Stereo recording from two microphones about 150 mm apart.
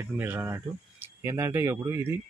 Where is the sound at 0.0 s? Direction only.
15° right (ahead or behind).